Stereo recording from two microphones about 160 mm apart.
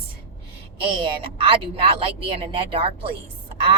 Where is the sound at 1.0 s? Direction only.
35° right (ahead or behind).